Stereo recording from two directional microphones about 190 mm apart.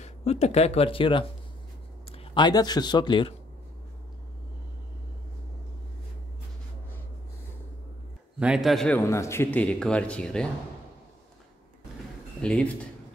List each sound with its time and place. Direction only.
0.0 s speech: 35° left (ahead or behind)
8.4 s a man's voice: 5° right (ahead or behind)
12.4 s a man's voice: 5° left (ahead or behind)